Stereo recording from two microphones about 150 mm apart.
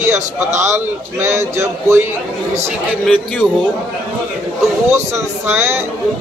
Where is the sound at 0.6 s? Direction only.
15° right (ahead or behind).